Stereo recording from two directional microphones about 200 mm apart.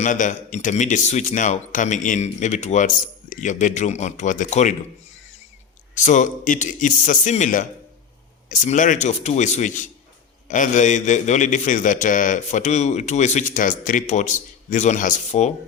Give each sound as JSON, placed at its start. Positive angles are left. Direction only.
{"t": 0.0, "sound": "a man's voice", "side_deg": 40}
{"t": 5.9, "sound": "a man's voice", "side_deg": 35}